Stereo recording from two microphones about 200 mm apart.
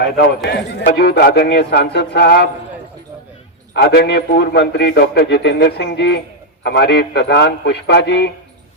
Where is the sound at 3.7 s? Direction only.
50° left (ahead or behind).